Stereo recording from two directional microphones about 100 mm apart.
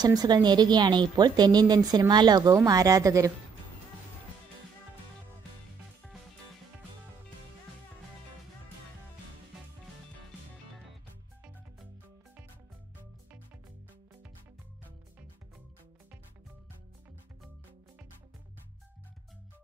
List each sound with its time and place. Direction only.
0.0 s a woman's voice: 40° right (ahead or behind)
2.5 s speech: 35° right (ahead or behind)